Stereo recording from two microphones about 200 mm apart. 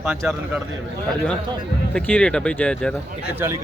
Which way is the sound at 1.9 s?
5° left (ahead or behind).